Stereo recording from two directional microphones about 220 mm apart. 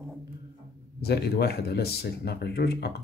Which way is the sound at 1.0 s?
45° left (ahead or behind).